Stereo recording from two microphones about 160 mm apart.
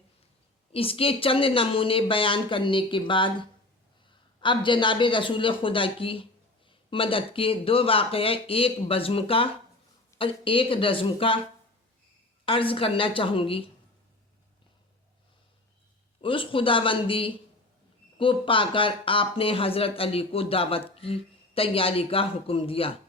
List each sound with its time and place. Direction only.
0.7 s speech: 35° left (ahead or behind)
4.4 s speech: 30° left (ahead or behind)
12.5 s speech: 35° left (ahead or behind)
16.2 s speech: 35° left (ahead or behind)